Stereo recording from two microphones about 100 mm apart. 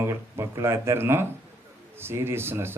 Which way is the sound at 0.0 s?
30° right (ahead or behind).